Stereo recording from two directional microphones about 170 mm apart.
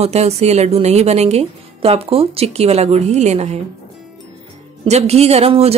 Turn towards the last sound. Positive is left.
turn(degrees=-35)  # may be behind; listen again after turning